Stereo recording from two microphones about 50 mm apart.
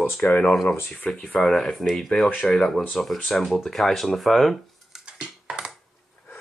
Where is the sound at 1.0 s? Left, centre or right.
Left.